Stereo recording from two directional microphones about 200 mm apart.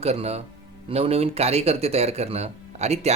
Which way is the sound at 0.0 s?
30° right (ahead or behind).